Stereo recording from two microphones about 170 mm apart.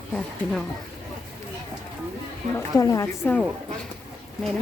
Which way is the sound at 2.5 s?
20° left (ahead or behind).